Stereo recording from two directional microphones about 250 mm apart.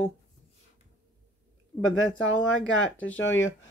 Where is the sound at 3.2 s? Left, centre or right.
Left.